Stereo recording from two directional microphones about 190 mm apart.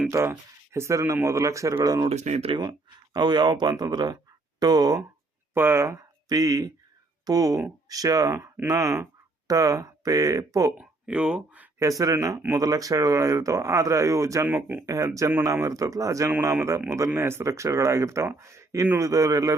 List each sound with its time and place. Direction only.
0.1 s speech: 15° right (ahead or behind)
2.0 s speech: 35° right (ahead or behind); by 10.7 s 15° right (ahead or behind)
10.8 s speech: 5° right (ahead or behind)